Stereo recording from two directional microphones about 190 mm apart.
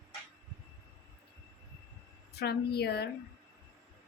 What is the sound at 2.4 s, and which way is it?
Speech, 60° left (ahead or behind).